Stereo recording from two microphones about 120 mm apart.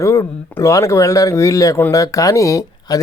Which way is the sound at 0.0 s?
25° left (ahead or behind).